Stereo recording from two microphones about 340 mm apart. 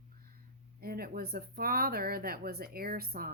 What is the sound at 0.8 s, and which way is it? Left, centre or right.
Speech, right.